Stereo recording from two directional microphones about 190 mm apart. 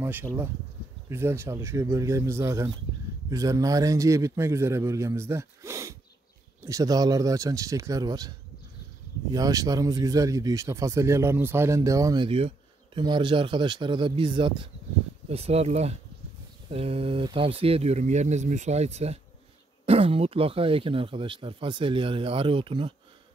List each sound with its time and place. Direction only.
0.0 s a man's voice: 10° right (ahead or behind)
9.3 s speech: 20° right (ahead or behind)